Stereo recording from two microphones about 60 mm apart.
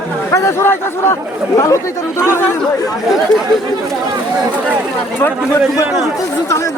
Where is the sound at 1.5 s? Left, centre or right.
Left.